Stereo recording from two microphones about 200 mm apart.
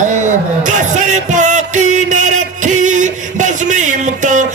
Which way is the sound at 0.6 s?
40° right (ahead or behind).